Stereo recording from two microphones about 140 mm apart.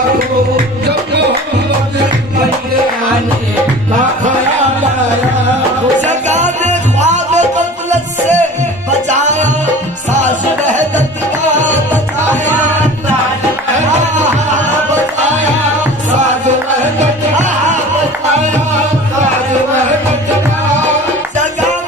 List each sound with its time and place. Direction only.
6.1 s music: 55° right (ahead or behind)
9.0 s music: 60° right (ahead or behind)
10.7 s music: 60° right (ahead or behind)